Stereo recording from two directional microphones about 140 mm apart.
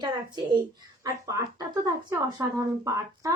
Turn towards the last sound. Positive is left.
turn(degrees=-20)  # may be behind; listen again after turning